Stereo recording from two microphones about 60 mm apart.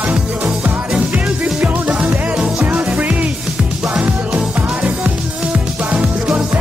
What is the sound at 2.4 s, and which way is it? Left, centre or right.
Music, centre.